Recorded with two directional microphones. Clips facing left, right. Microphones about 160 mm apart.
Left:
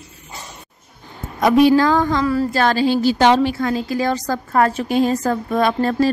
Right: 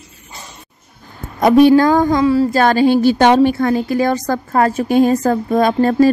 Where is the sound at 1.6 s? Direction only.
45° right (ahead or behind).